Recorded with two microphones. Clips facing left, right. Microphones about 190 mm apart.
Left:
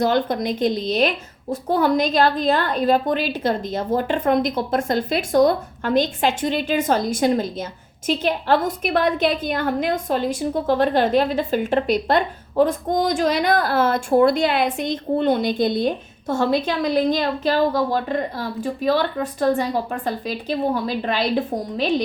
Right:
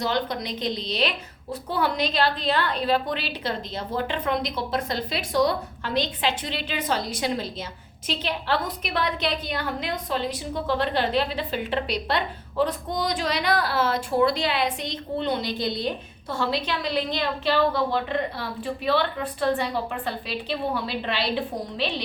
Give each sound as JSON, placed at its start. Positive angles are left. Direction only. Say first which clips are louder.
{"t": 0.0, "sound": "a woman's voice", "louder": "left 7 dB", "side_deg": 50}